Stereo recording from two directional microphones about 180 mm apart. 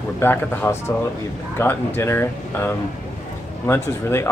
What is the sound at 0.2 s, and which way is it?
Speech, 10° left (ahead or behind).